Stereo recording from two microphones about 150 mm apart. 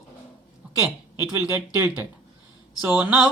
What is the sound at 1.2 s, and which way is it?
Speech, 15° right (ahead or behind).